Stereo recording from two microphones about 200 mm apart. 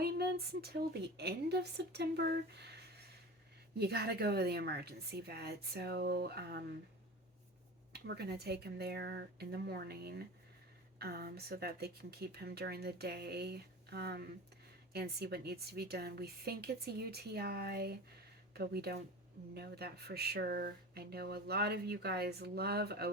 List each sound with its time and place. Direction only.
0.0 s a woman's voice: 50° right (ahead or behind)
3.8 s speech: 55° right (ahead or behind)
7.9 s speech: 55° right (ahead or behind)